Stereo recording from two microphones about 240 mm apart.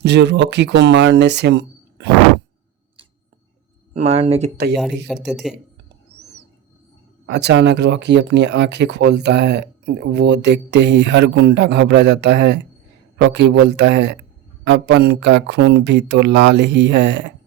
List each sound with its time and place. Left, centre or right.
0.0 s speech: right
3.9 s speech: right
5.0 s speech: centre
7.3 s speech: right